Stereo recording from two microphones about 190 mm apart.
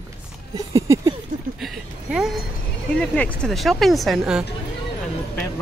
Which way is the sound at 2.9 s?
5° left (ahead or behind).